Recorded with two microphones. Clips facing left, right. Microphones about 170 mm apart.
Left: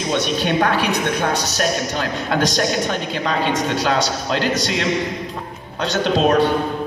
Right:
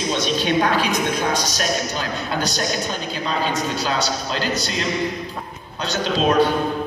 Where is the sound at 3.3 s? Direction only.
70° left (ahead or behind).